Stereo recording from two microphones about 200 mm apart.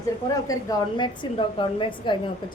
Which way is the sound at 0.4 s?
20° left (ahead or behind).